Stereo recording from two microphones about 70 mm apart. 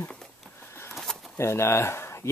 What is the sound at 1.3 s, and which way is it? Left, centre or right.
Speech, left.